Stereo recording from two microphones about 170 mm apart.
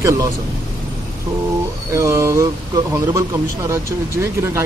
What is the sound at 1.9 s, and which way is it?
A man's voice, 15° right (ahead or behind).